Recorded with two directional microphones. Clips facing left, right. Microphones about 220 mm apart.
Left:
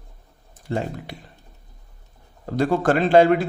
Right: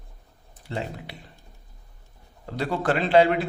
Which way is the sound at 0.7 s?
45° left (ahead or behind).